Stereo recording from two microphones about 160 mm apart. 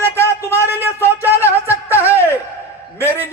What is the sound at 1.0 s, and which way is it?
Speech, 10° right (ahead or behind).